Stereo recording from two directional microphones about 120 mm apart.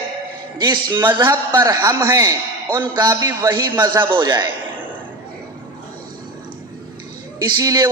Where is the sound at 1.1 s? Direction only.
25° right (ahead or behind).